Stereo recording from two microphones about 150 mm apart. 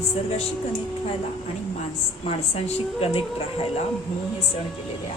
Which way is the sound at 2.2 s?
40° left (ahead or behind).